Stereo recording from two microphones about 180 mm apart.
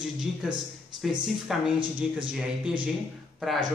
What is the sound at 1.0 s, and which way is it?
Speech, centre (ahead or behind).